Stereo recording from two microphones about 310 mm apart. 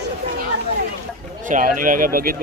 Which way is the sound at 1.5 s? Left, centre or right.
Right.